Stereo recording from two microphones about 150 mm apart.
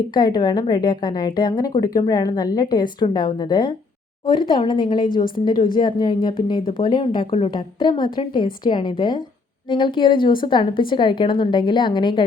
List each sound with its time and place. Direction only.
0.1 s a woman's voice: 30° left (ahead or behind)